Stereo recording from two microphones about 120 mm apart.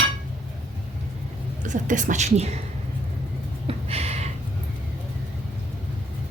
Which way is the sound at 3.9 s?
60° right (ahead or behind).